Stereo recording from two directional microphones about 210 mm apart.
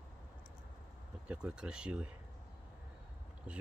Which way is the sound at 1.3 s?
5° right (ahead or behind).